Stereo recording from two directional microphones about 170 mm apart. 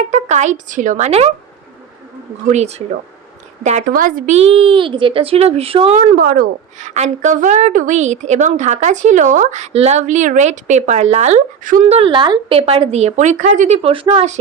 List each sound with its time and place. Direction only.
0.1 s a woman's voice: 45° right (ahead or behind)
2.5 s a woman's voice: 40° right (ahead or behind)
4.4 s speech: 35° right (ahead or behind)
6.1 s a woman's voice: 55° right (ahead or behind)
11.9 s speech: 35° right (ahead or behind)